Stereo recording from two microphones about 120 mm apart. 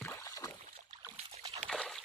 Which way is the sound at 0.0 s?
25° left (ahead or behind).